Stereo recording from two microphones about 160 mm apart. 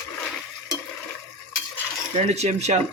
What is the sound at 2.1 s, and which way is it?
Speech, 45° right (ahead or behind).